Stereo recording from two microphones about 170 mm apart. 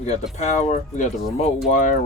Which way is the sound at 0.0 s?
45° left (ahead or behind).